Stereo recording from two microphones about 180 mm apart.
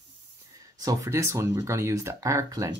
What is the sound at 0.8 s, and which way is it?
Speech, 20° right (ahead or behind).